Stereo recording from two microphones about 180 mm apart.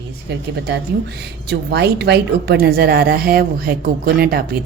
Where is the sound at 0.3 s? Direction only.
70° right (ahead or behind).